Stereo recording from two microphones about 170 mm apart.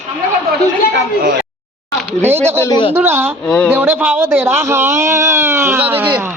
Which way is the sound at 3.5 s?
5° left (ahead or behind).